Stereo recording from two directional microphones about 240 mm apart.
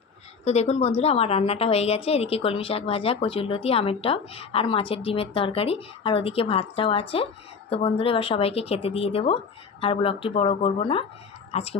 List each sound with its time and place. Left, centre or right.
0.4 s a woman's voice: left